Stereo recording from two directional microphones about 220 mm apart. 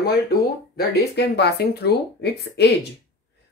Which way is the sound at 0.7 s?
50° left (ahead or behind).